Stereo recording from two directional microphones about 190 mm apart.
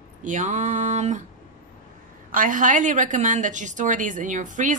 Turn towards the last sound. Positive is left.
turn(degrees=-40)  # may be behind; listen again after turning